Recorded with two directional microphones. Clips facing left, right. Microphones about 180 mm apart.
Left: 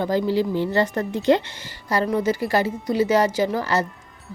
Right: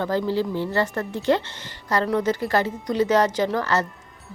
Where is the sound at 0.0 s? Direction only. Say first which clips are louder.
Left 2 dB; 15° left (ahead or behind).